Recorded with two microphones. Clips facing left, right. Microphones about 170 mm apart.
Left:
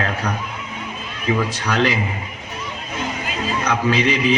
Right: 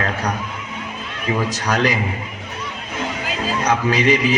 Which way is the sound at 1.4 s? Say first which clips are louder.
Even; 40° right (ahead or behind).